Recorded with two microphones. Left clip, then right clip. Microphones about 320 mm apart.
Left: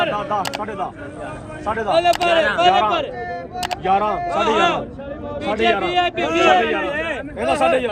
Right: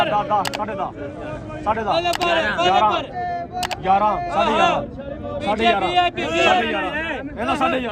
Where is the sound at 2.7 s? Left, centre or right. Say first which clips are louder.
Even; right.